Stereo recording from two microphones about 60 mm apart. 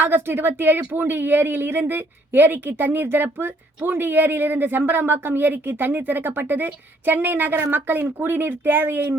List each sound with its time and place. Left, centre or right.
0.0 s speech: right